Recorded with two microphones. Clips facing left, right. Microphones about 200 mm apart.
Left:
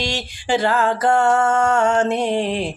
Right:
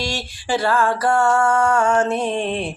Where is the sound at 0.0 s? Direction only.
20° left (ahead or behind).